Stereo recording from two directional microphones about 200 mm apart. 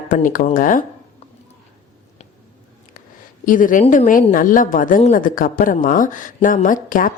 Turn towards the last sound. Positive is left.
turn(degrees=40)  # may be behind; listen again after turning